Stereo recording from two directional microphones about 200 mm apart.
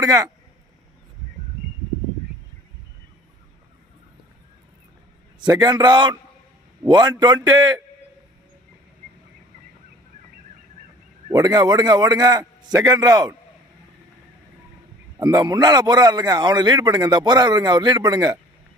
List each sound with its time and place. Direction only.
0.0 s speech: 20° right (ahead or behind)
5.4 s a man's voice: 20° right (ahead or behind)
11.3 s a man's voice: 20° right (ahead or behind)
15.2 s a man's voice: 20° right (ahead or behind)